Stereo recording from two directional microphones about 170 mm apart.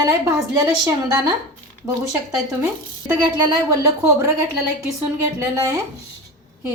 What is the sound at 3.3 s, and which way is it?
Speech, 20° right (ahead or behind).